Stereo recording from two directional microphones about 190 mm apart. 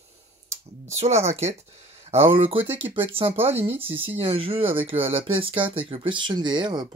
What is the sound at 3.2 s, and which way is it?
Speech, 30° right (ahead or behind).